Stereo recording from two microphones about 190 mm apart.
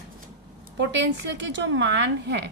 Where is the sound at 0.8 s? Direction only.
65° right (ahead or behind).